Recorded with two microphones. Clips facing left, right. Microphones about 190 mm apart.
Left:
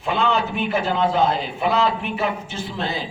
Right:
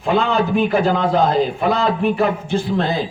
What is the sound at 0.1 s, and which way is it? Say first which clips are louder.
A man's voice: right 5 dB; 45° right (ahead or behind).